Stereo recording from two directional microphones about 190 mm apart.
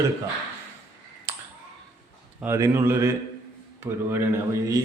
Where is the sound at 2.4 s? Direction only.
15° right (ahead or behind).